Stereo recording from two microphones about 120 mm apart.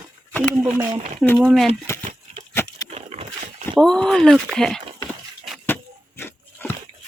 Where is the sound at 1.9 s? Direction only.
20° left (ahead or behind).